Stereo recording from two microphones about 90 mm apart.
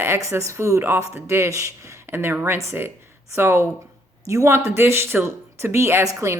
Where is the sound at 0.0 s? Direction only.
35° right (ahead or behind).